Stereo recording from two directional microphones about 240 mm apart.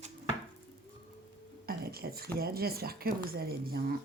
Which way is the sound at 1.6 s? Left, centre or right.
Right.